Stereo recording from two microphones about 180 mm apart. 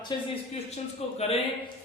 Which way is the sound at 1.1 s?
35° left (ahead or behind).